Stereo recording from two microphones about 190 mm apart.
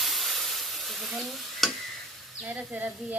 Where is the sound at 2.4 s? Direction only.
10° right (ahead or behind).